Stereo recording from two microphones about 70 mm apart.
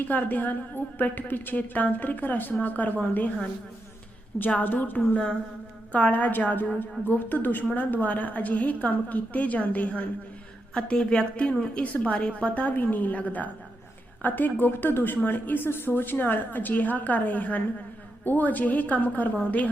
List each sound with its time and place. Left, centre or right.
0.1 s speech: left
4.4 s a woman's voice: left